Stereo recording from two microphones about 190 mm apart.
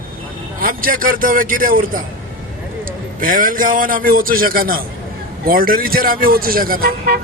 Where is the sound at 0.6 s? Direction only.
45° right (ahead or behind).